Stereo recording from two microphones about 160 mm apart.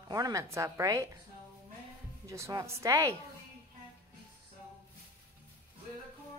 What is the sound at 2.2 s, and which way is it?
Speech, 20° right (ahead or behind).